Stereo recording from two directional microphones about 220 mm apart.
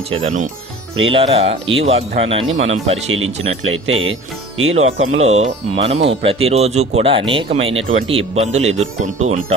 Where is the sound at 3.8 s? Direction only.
65° right (ahead or behind).